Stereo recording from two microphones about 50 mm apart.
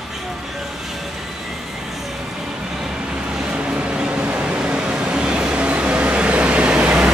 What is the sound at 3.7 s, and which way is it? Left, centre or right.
Vehicle, centre.